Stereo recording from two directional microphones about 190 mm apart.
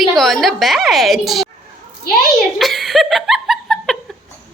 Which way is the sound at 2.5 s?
Centre (ahead or behind).